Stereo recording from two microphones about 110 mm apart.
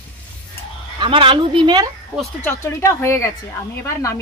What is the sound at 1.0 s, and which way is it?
Speech, 50° right (ahead or behind).